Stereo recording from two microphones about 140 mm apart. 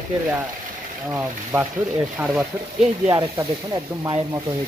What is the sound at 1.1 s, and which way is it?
Speech, 15° right (ahead or behind).